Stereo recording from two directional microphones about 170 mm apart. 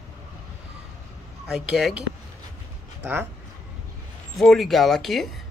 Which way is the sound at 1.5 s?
Centre (ahead or behind).